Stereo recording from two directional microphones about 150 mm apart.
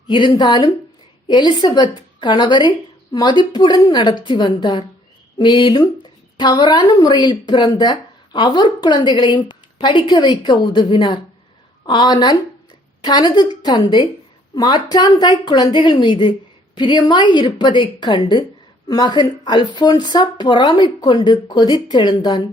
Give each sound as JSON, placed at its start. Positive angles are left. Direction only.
{"t": 0.1, "sound": "speech", "side_deg": 30}